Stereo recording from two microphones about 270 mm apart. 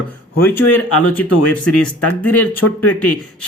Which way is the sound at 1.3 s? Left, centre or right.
Left.